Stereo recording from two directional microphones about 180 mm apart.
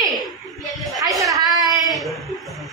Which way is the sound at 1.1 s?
20° right (ahead or behind).